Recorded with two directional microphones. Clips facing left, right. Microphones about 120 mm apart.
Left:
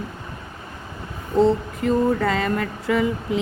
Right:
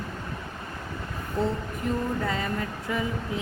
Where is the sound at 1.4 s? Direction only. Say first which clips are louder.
Left 10 dB; 90° left.